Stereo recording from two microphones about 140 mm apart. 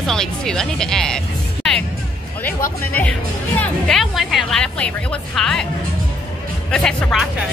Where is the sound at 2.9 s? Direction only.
10° left (ahead or behind).